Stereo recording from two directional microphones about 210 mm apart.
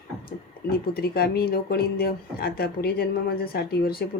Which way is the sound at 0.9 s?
45° left (ahead or behind).